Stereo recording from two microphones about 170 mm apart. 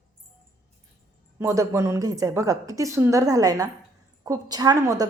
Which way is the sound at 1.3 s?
15° right (ahead or behind).